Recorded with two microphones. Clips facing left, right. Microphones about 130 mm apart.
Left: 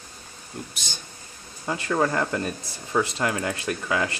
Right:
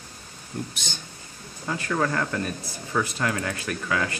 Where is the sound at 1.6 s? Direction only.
20° left (ahead or behind).